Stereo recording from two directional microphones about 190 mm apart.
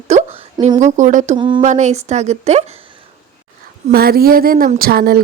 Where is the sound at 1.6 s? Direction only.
40° right (ahead or behind).